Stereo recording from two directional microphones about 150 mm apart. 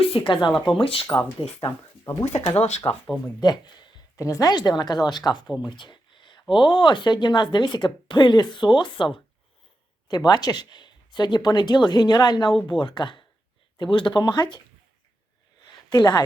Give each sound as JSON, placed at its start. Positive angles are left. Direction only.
{"t": 0.1, "sound": "speech", "side_deg": 35}
{"t": 0.5, "sound": "speech", "side_deg": 0}
{"t": 0.8, "sound": "speech", "side_deg": 35}
{"t": 2.2, "sound": "speech", "side_deg": 45}
{"t": 4.2, "sound": "speech", "side_deg": 25}
{"t": 5.6, "sound": "a sound", "side_deg": 30}
{"t": 6.5, "sound": "speech", "side_deg": 35}
{"t": 10.1, "sound": "speech", "side_deg": 25}
{"t": 15.9, "sound": "speech", "side_deg": 25}